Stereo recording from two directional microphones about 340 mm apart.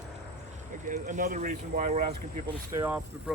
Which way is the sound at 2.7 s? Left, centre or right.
Centre.